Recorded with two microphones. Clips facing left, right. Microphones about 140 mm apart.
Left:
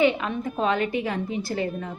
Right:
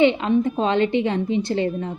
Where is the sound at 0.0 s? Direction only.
25° right (ahead or behind).